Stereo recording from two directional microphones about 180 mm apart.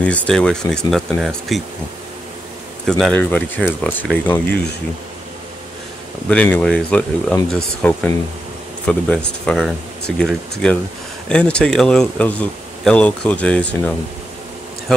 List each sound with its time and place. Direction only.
0.0 s speech: 5° left (ahead or behind)
2.9 s speech: 5° left (ahead or behind)
6.2 s speech: 5° left (ahead or behind)